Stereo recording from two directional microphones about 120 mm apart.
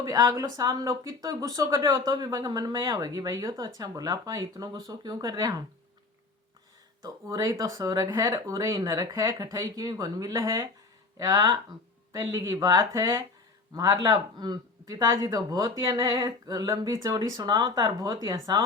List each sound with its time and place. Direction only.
0.0 s speech: 30° right (ahead or behind)
7.3 s speech: 30° right (ahead or behind)